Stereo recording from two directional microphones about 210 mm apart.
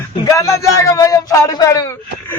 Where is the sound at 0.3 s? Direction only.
15° left (ahead or behind).